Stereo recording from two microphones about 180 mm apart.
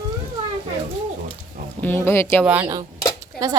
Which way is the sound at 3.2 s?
20° right (ahead or behind).